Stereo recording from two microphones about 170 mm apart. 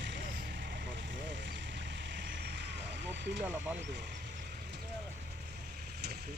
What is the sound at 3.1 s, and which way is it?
Vehicle, 90° right.